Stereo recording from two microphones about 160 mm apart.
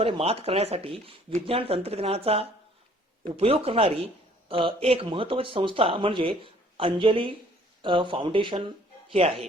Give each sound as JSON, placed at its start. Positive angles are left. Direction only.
{"t": 0.0, "sound": "speech", "side_deg": -35}